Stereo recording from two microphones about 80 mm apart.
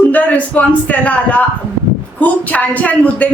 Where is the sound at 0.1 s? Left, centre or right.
Centre.